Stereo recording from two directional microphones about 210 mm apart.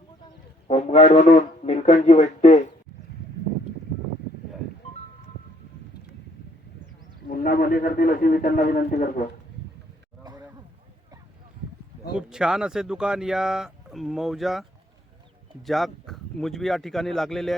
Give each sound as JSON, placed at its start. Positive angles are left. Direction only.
{"t": 0.7, "sound": "speech", "side_deg": 30}
{"t": 7.3, "sound": "a man's voice", "side_deg": 45}
{"t": 12.1, "sound": "speech", "side_deg": -5}